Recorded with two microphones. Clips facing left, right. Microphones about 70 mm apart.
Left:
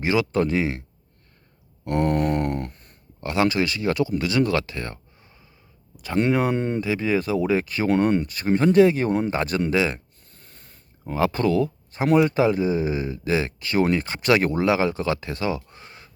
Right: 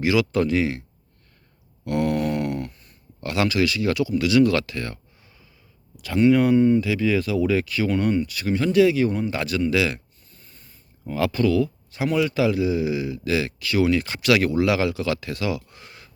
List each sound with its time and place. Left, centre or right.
0.0 s speech: left
1.8 s a sound: left
3.2 s speech: left
6.3 s speech: left
6.8 s speech: left
7.9 s speech: left
8.3 s speech: left
9.3 s speech: left
10.3 s a sound: left
11.0 s speech: left